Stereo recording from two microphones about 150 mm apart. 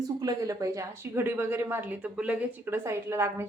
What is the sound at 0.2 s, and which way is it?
A woman's voice, 25° right (ahead or behind).